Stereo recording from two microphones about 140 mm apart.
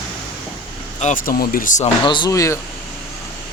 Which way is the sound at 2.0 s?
35° left (ahead or behind).